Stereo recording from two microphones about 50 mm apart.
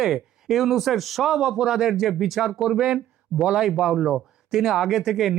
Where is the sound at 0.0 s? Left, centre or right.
Centre.